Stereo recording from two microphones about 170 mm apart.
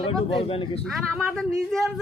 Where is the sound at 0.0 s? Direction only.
35° left (ahead or behind).